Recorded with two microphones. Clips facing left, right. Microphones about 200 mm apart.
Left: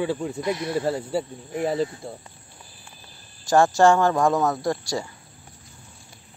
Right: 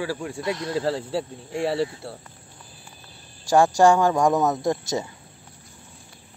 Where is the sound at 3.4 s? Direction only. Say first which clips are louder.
Even; 10° right (ahead or behind).